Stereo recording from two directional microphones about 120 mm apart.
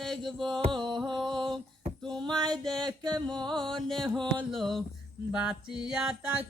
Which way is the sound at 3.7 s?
5° left (ahead or behind).